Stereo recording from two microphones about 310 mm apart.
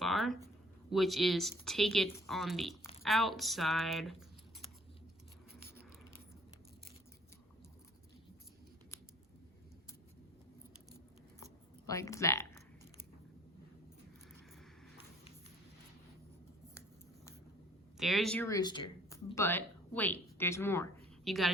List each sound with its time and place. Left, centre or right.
0.0 s a sound: centre
0.3 s a sound: centre
0.9 s speech: centre
5.5 s scissors: right
11.9 s speech: centre
17.9 s speech: centre